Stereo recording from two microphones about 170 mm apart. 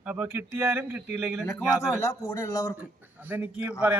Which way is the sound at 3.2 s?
10° right (ahead or behind).